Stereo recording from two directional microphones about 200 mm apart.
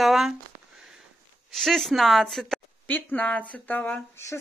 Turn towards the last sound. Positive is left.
turn(degrees=15)  # may be behind; listen again after turning